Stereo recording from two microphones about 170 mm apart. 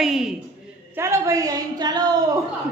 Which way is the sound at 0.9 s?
15° right (ahead or behind).